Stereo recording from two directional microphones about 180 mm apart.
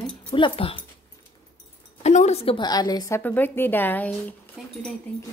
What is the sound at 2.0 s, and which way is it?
A woman's voice, 40° left (ahead or behind).